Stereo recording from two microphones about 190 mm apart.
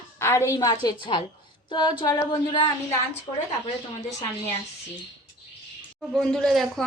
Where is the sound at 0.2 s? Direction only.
15° left (ahead or behind).